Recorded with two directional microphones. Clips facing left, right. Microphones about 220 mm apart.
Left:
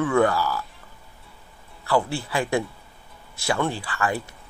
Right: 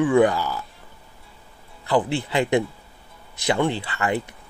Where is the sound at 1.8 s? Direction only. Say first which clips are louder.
Right 2 dB; 20° right (ahead or behind).